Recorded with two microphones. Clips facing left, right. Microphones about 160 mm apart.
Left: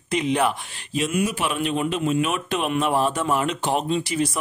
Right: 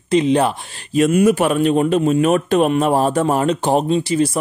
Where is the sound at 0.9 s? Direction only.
50° right (ahead or behind).